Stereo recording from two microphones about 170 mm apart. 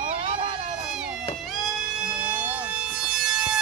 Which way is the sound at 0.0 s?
30° right (ahead or behind).